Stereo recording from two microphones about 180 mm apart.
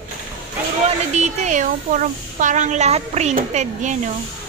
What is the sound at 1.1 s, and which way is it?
Speech, 40° right (ahead or behind).